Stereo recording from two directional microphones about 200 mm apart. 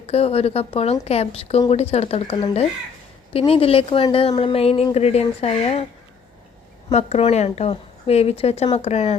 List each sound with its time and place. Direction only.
0.1 s a woman's voice: 30° left (ahead or behind)
6.9 s a woman's voice: 30° left (ahead or behind)